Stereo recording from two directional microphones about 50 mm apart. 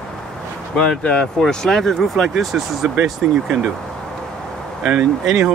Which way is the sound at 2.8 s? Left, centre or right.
Centre.